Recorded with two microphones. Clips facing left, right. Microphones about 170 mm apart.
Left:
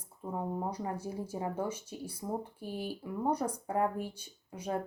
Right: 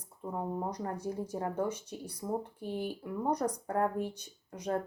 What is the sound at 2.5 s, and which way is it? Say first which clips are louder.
Speech: right 3 dB; 20° right (ahead or behind).